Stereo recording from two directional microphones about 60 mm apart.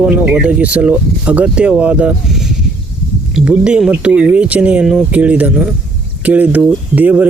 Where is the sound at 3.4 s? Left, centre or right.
Centre.